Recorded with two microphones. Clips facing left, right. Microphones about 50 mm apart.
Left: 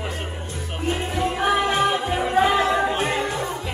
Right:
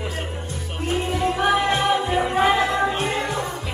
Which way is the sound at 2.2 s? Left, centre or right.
Centre.